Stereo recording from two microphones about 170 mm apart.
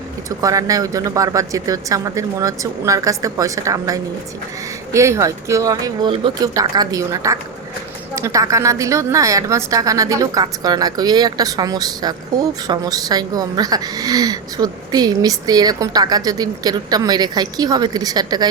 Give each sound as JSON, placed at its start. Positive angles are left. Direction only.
{"t": 0.3, "sound": "a woman's voice", "side_deg": -20}